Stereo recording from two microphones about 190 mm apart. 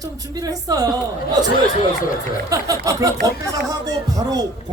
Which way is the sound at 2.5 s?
20° right (ahead or behind).